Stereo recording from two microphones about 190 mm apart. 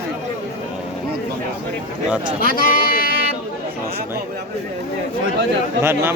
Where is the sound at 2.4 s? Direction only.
50° left (ahead or behind).